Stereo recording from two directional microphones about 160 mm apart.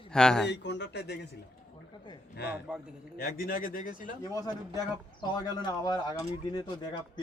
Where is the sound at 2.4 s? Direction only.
85° left.